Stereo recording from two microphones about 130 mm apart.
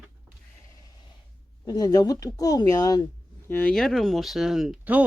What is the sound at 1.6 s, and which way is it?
Speech, 30° left (ahead or behind).